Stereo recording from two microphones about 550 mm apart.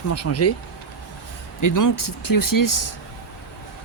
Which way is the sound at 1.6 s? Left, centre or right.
Left.